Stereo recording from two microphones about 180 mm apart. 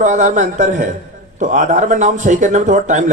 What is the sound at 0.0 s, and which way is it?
A man's voice, 45° right (ahead or behind).